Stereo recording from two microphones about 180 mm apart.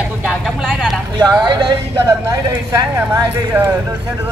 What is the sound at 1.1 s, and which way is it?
Speech, 25° right (ahead or behind).